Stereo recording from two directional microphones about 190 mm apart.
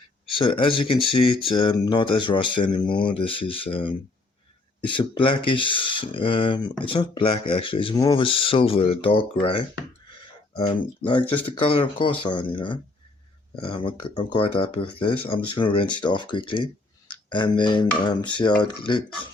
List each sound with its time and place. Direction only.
0.3 s speech: 25° left (ahead or behind)
10.7 s speech: 25° left (ahead or behind)